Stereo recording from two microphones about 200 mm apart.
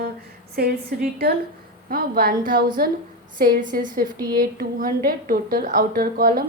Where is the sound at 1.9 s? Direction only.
45° right (ahead or behind).